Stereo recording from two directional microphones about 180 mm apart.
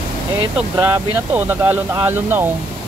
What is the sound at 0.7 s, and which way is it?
Speech, 15° right (ahead or behind).